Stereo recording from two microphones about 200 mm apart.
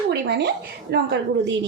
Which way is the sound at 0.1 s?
55° right (ahead or behind).